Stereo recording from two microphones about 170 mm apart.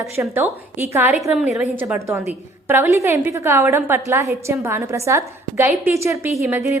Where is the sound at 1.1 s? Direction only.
Centre (ahead or behind).